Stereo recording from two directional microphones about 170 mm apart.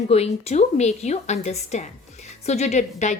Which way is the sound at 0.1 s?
40° left (ahead or behind).